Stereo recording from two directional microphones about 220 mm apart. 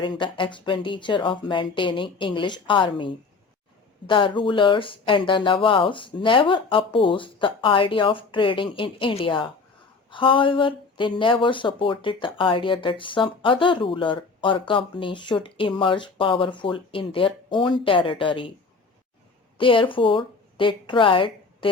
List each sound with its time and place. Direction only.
0.0 s speech: 20° left (ahead or behind)
19.5 s speech: 25° left (ahead or behind)